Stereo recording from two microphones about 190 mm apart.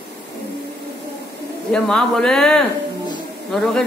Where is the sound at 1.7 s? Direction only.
5° left (ahead or behind).